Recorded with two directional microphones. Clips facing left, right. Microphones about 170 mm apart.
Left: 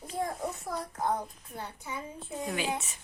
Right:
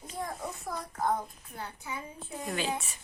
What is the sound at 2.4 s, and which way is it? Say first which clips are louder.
Speech: even; 5° left (ahead or behind).